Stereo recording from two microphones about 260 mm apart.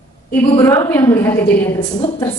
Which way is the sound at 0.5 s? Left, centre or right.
Centre.